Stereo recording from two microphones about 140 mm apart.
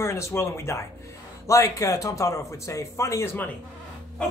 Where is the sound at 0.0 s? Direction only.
20° left (ahead or behind).